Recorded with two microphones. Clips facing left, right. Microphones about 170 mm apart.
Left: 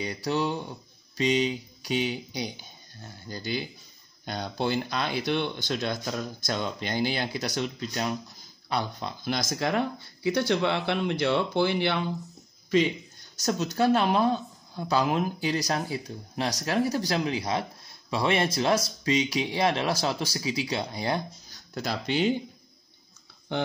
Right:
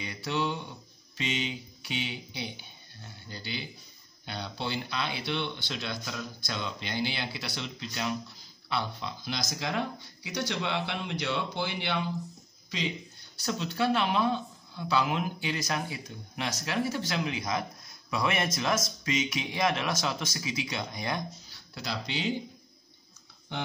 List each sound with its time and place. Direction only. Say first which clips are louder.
0.0 s speech: left 4 dB; 35° left (ahead or behind); by 12.0 s 55° left (ahead or behind)
13.4 s speech: left 5 dB; 45° left (ahead or behind)